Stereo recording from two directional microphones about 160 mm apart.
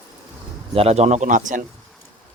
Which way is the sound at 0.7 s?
40° right (ahead or behind).